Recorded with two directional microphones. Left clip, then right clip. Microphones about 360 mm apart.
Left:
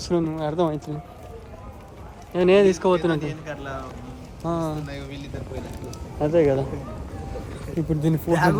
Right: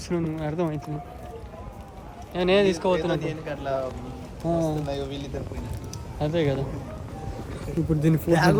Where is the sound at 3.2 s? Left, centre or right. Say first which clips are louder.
Even; centre.